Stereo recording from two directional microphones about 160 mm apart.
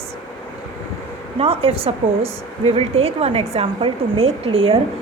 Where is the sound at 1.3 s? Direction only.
35° right (ahead or behind).